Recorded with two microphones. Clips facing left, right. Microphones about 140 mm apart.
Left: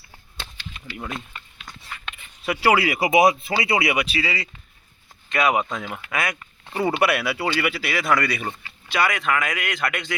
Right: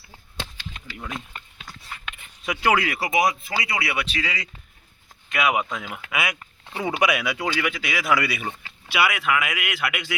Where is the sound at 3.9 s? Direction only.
10° left (ahead or behind).